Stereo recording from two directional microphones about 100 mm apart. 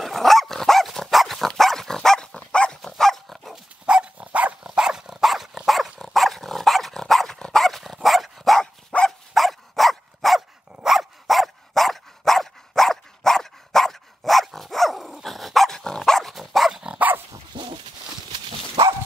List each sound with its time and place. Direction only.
0.0 s dog: centre (ahead or behind)
3.8 s dog: 10° right (ahead or behind)
17.5 s dog: 50° right (ahead or behind)